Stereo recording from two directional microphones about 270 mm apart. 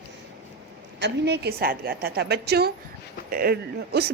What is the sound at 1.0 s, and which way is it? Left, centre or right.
A woman's voice, right.